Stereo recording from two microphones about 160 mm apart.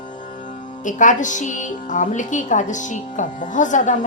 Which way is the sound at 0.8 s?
50° left (ahead or behind).